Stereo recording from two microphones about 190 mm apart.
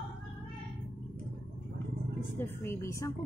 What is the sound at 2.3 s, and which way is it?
Speech, 15° left (ahead or behind).